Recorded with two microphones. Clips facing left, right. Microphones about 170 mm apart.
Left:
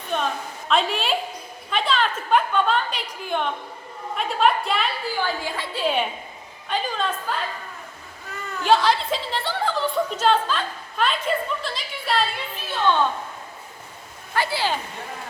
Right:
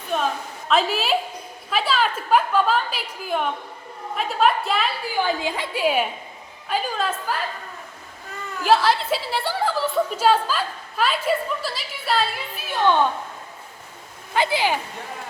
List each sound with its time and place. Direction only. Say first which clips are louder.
0.1 s a sound: right 2 dB; 5° right (ahead or behind)
0.7 s a woman's voice: right 2 dB; centre (ahead or behind)
5.1 s a woman's voice: right 3 dB; 15° right (ahead or behind)
8.6 s a woman's voice: even; 5° right (ahead or behind)
12.6 s a woman's voice: right 3 dB; 15° right (ahead or behind)
14.3 s a woman's voice: right 3 dB; 20° right (ahead or behind)